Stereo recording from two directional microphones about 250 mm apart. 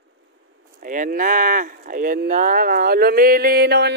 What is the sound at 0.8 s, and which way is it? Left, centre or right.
Speech, right.